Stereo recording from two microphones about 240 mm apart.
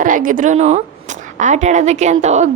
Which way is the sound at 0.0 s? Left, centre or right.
Right.